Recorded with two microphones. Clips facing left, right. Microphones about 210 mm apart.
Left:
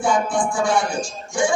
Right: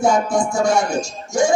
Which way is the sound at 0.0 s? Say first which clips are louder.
Right 3 dB; 40° right (ahead or behind).